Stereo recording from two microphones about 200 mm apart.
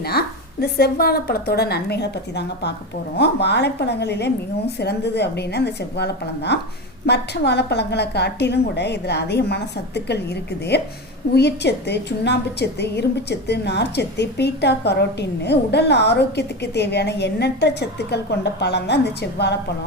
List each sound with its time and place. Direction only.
0.0 s a woman's voice: 50° left (ahead or behind)